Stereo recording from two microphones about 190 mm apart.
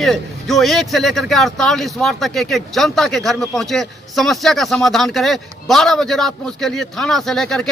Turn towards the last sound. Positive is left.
turn(degrees=0)  # may be behind; listen again after turning